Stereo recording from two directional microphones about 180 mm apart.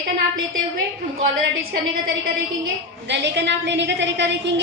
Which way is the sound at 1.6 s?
55° right (ahead or behind).